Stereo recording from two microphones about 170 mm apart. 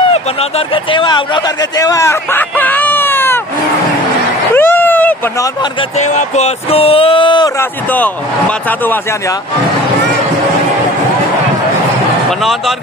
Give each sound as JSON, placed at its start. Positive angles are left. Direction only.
{"t": 0.1, "sound": "a man's voice", "side_deg": 35}
{"t": 4.6, "sound": "a sound", "side_deg": 10}
{"t": 5.4, "sound": "speech", "side_deg": 25}
{"t": 5.9, "sound": "speech", "side_deg": 45}
{"t": 7.9, "sound": "speech", "side_deg": 10}
{"t": 12.3, "sound": "speech", "side_deg": 0}